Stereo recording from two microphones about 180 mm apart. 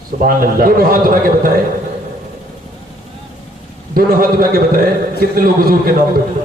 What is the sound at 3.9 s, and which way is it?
A man's voice, 55° right (ahead or behind).